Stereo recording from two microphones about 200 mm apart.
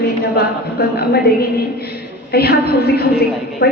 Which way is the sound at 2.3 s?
50° left (ahead or behind).